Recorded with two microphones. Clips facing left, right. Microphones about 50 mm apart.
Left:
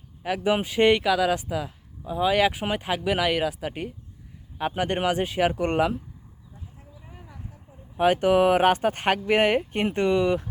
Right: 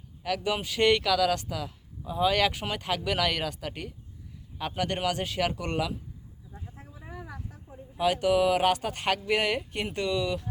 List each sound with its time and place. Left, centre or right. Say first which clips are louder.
0.2 s speech: left 5 dB; left
7.0 s vehicle: right 8 dB; right
7.9 s speech: left 5 dB; left